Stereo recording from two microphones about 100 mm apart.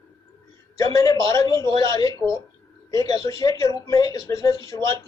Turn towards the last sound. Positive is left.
turn(degrees=30)  # may be behind; listen again after turning